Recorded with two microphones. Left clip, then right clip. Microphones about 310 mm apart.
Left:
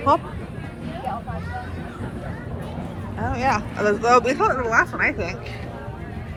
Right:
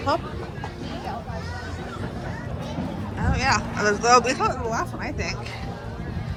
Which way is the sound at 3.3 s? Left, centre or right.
Centre.